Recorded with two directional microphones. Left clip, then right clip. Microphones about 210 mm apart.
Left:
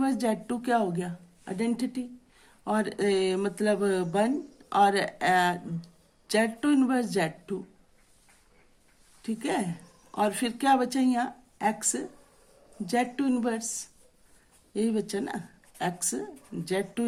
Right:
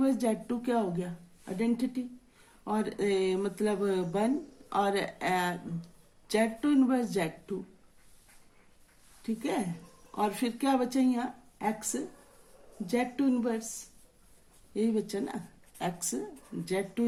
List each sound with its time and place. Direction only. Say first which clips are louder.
0.0 s speech: left 1 dB; 45° left (ahead or behind)
9.2 s speech: left 3 dB; 45° left (ahead or behind)